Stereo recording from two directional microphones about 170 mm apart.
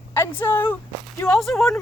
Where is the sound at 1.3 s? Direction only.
Centre (ahead or behind).